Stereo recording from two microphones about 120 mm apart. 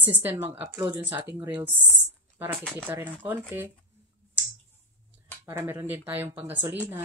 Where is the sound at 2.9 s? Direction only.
20° right (ahead or behind).